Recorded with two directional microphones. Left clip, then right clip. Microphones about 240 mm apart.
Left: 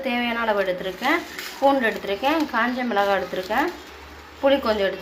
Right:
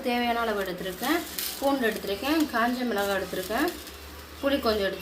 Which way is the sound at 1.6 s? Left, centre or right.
Centre.